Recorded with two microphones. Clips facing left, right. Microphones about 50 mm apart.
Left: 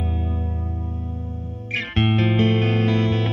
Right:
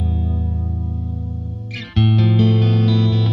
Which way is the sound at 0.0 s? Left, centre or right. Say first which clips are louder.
Right 3 dB; left.